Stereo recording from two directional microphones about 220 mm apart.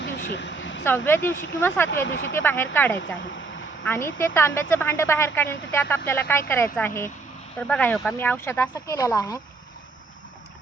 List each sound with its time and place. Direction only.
0.3 s a sound: 55° left (ahead or behind)
0.9 s a woman's voice: 10° left (ahead or behind)
2.0 s speech: 55° left (ahead or behind)
2.3 s a woman's voice: 10° left (ahead or behind)